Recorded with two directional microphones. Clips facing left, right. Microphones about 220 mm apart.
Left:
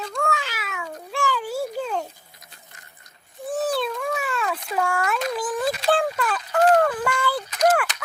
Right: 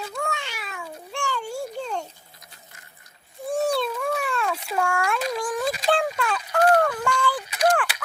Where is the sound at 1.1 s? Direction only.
90° left.